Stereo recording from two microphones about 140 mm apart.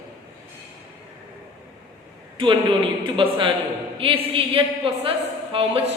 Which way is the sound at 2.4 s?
35° right (ahead or behind).